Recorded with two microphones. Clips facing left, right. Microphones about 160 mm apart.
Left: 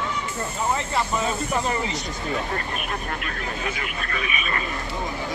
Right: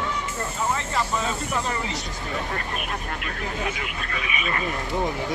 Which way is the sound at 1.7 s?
20° left (ahead or behind).